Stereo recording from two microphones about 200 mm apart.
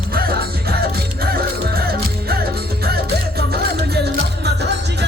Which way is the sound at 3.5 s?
55° right (ahead or behind).